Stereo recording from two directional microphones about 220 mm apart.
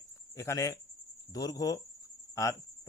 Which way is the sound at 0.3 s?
15° left (ahead or behind).